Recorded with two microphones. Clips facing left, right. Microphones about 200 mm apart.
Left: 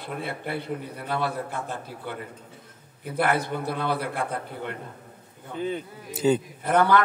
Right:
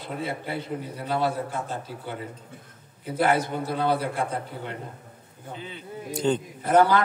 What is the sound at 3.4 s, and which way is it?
A man's voice, 55° left (ahead or behind).